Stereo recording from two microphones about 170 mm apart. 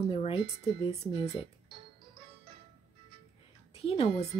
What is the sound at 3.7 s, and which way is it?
Speech, 35° left (ahead or behind).